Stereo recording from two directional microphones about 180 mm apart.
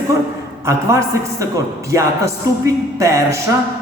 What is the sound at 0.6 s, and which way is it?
A man's voice, 15° right (ahead or behind).